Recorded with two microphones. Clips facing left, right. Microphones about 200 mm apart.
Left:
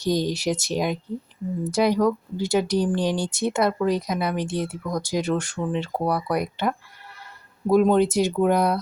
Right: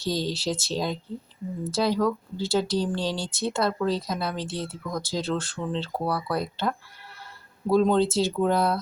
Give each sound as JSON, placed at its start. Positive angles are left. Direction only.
{"t": 0.0, "sound": "speech", "side_deg": 20}